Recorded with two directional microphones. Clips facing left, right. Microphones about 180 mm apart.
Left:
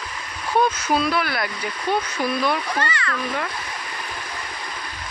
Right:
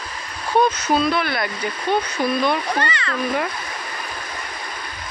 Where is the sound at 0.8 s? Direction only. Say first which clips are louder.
Right 2 dB; 5° left (ahead or behind).